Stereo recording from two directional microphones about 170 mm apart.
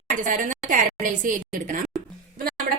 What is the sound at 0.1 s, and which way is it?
A woman's voice, 50° right (ahead or behind).